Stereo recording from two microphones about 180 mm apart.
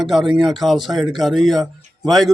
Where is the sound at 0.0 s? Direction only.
Centre (ahead or behind).